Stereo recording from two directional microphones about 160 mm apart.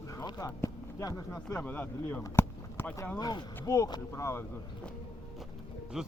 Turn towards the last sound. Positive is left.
turn(degrees=-5)  # may be behind; listen again after turning